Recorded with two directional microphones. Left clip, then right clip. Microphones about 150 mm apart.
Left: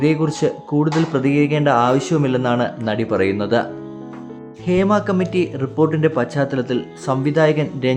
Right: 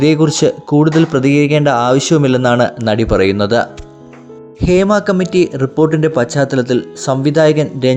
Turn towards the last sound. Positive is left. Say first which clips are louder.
# right 6 dB
turn(degrees=-30)  # may be behind; listen again after turning